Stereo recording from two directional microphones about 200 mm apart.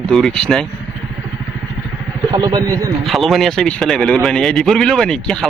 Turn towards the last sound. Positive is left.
turn(degrees=5)  # may be behind; listen again after turning